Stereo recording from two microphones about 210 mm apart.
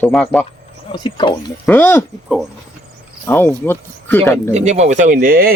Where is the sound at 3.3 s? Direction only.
10° left (ahead or behind).